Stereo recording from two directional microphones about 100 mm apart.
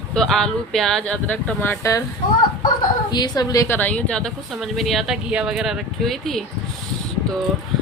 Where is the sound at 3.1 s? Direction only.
40° left (ahead or behind).